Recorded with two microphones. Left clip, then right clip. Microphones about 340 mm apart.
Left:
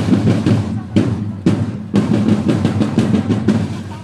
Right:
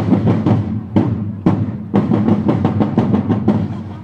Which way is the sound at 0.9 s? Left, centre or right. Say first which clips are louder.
Even; right.